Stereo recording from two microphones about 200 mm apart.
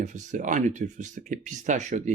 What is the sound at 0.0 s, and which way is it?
Speech, 40° right (ahead or behind).